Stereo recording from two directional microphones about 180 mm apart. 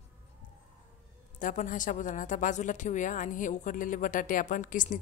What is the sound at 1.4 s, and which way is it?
A woman's voice, 45° left (ahead or behind).